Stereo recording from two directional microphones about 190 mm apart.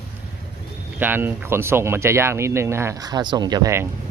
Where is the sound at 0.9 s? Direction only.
10° right (ahead or behind).